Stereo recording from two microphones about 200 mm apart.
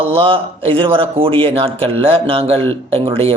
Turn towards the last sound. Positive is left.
turn(degrees=-30)  # may be behind; listen again after turning